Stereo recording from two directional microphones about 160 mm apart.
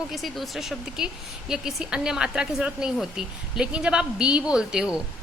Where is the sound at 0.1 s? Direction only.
Centre (ahead or behind).